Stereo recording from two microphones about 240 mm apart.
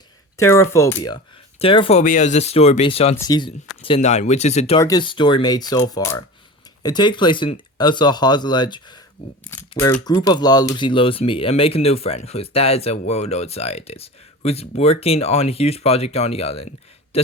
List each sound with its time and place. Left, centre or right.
0.3 s speech: centre; by 4.8 s left
4.8 s speech: centre